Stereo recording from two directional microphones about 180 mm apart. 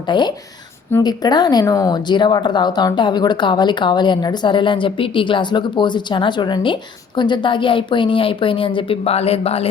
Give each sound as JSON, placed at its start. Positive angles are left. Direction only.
{"t": 0.1, "sound": "speech", "side_deg": 25}